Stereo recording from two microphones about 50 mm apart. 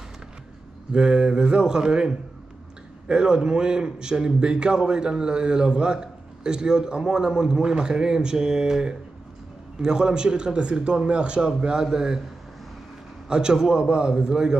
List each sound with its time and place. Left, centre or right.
0.9 s a man's voice: centre
13.3 s a man's voice: centre